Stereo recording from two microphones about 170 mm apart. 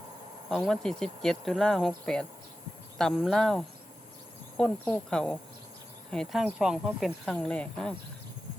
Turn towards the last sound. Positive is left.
turn(degrees=5)  # may be behind; listen again after turning